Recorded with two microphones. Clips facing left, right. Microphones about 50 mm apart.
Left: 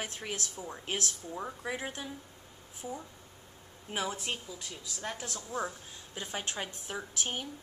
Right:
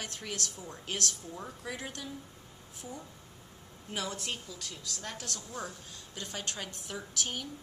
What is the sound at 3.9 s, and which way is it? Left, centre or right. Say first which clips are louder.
A woman's voice: left 2 dB; centre.